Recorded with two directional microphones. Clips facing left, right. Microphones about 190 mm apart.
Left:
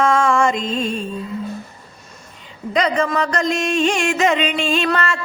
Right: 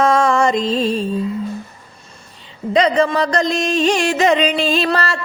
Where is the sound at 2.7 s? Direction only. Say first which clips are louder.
Right 4 dB; 30° right (ahead or behind).